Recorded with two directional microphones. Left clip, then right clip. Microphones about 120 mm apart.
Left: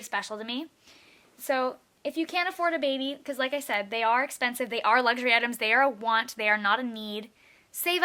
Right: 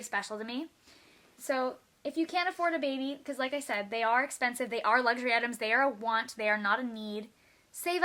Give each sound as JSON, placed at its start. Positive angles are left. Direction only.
{"t": 0.0, "sound": "a woman's voice", "side_deg": 20}